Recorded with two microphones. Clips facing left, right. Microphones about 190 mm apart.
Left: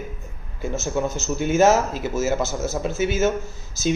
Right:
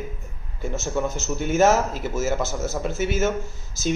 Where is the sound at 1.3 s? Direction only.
15° left (ahead or behind).